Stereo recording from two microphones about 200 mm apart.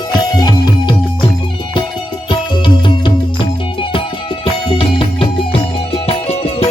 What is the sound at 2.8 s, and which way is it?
Music, 25° left (ahead or behind).